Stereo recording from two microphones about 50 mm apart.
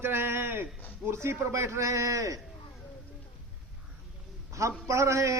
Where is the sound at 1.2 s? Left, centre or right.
Right.